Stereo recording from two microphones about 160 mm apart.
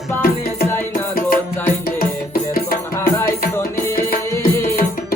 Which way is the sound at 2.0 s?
65° left (ahead or behind).